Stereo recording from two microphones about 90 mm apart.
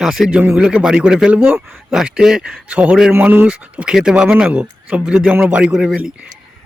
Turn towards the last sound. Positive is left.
turn(degrees=-10)  # may be behind; listen again after turning